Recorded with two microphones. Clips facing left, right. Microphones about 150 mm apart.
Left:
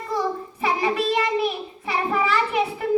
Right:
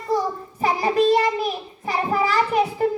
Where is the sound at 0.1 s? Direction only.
35° right (ahead or behind).